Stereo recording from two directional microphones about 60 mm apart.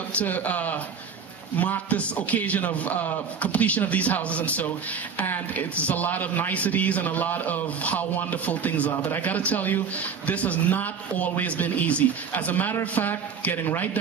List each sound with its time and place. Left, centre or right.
0.1 s a man's voice: left